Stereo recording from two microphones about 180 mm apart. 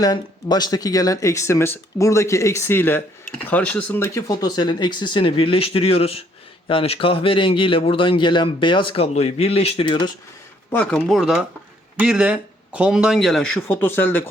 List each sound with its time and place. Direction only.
0.0 s speech: 20° left (ahead or behind)
10.7 s speech: 10° left (ahead or behind)